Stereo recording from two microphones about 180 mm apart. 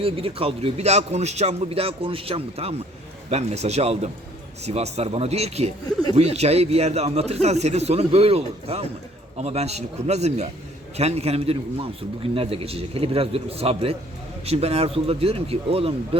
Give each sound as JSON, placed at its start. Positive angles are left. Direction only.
{"t": 0.0, "sound": "a man's voice", "side_deg": -30}